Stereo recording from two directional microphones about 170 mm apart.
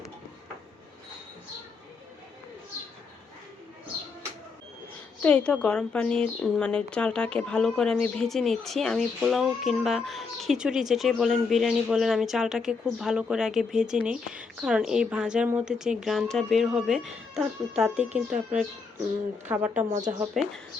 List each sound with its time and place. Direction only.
5.2 s a woman's voice: 5° left (ahead or behind)
17.9 s speech: 40° right (ahead or behind)
19.7 s a woman's voice: 45° right (ahead or behind)
20.3 s a woman's voice: centre (ahead or behind)